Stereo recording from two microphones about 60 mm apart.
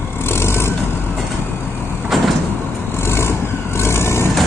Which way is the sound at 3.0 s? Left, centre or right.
Left.